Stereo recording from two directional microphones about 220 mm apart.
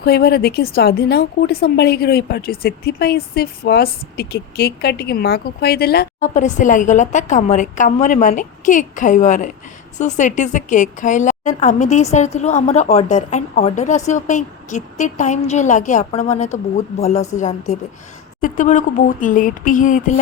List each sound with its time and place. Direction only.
0.0 s a woman's voice: 45° left (ahead or behind)